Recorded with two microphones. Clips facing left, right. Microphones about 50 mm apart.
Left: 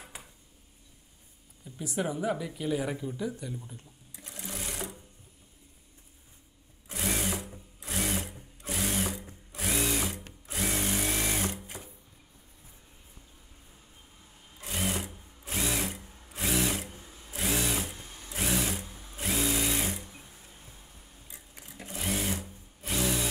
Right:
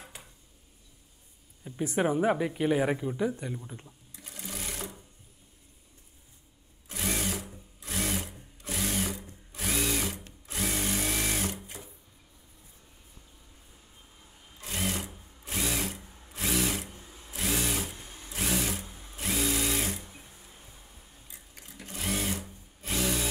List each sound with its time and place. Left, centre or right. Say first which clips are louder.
0.0 s a sound: left 1 dB; centre
1.6 s speech: right 5 dB; right
4.2 s sewing machine: even; centre
6.9 s sewing machine: even; centre
9.6 s drill: even; centre
14.6 s drill: even; centre
17.0 s sewing machine: even; centre
17.3 s sewing machine: left 1 dB; centre
19.0 s drill: even; centre
21.5 s sewing machine: left 1 dB; centre
21.9 s sewing machine: even; centre
22.8 s a sound: even; centre